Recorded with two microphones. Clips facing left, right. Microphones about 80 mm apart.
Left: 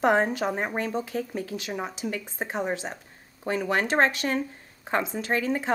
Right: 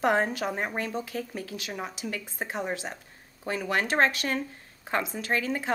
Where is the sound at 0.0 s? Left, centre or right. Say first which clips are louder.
Left 3 dB; centre.